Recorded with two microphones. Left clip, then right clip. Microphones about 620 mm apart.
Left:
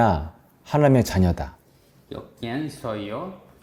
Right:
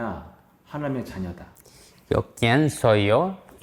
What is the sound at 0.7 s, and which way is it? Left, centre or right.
Speech, left.